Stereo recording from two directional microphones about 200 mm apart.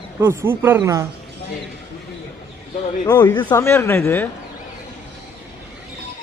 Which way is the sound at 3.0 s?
20° left (ahead or behind).